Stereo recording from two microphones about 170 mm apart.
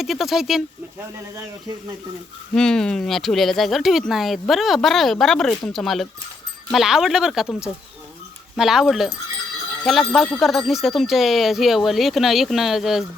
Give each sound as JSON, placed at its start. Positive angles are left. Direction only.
{"t": 0.0, "sound": "speech", "side_deg": 0}
{"t": 2.6, "sound": "speech", "side_deg": 5}